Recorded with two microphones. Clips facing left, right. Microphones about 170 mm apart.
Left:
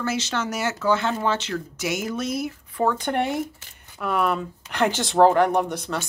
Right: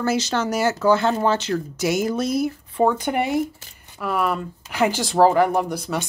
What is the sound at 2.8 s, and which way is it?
A woman's voice, 10° right (ahead or behind).